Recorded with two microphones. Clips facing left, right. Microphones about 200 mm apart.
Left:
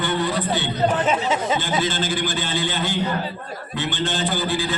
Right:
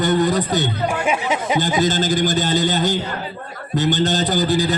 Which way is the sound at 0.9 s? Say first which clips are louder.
Even; 10° right (ahead or behind).